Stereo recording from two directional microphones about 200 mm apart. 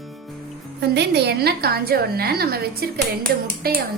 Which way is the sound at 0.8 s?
55° right (ahead or behind).